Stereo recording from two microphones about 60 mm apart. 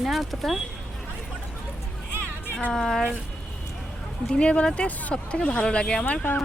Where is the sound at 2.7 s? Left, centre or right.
Centre.